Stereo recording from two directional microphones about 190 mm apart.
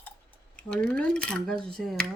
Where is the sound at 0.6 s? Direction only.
5° left (ahead or behind).